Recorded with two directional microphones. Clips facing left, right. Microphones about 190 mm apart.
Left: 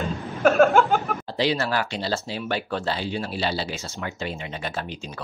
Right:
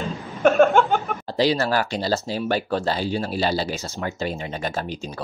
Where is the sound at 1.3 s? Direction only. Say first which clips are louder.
Right 4 dB; 40° right (ahead or behind).